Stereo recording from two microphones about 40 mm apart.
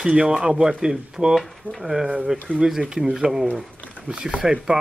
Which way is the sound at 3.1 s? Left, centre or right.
Centre.